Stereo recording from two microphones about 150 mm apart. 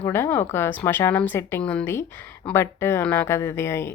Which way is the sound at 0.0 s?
15° left (ahead or behind).